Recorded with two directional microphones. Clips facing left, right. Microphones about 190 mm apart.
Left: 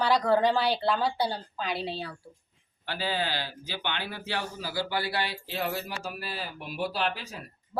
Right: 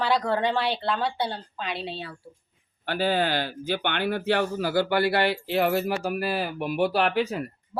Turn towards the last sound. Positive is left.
turn(degrees=-65)  # may be behind; listen again after turning